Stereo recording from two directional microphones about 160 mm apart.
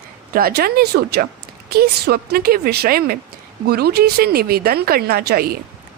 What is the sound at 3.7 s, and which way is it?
A woman's voice, 80° right.